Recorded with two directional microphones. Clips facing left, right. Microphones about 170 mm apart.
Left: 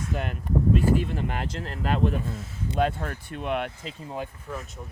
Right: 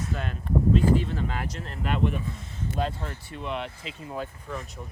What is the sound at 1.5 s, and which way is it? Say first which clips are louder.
Speech: left 2 dB; 35° left (ahead or behind).